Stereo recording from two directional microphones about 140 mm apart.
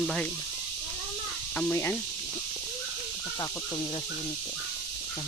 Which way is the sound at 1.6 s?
15° left (ahead or behind).